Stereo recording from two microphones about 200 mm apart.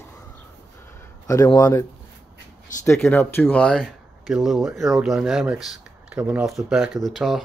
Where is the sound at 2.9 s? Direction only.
10° left (ahead or behind).